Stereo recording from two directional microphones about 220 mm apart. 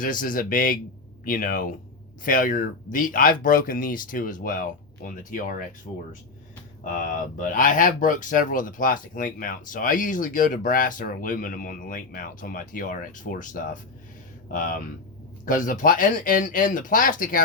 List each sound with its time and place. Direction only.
0.0 s speech: 40° left (ahead or behind)